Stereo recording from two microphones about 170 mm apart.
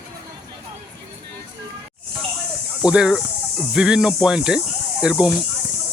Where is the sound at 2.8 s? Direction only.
5° right (ahead or behind).